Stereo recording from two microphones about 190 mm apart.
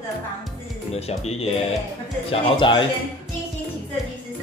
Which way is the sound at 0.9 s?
35° left (ahead or behind).